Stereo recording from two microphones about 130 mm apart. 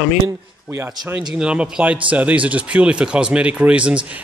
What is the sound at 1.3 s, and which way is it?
Speech, 5° right (ahead or behind).